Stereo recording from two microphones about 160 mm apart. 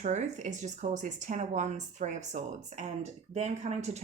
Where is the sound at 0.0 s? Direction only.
45° right (ahead or behind).